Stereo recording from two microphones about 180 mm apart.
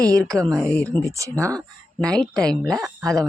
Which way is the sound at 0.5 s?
5° left (ahead or behind).